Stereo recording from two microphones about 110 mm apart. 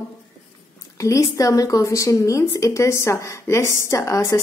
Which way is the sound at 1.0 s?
30° left (ahead or behind).